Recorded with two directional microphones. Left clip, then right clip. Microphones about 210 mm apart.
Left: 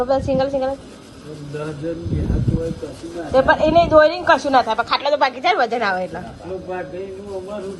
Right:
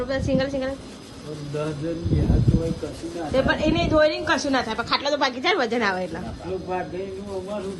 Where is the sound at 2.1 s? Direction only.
Centre (ahead or behind).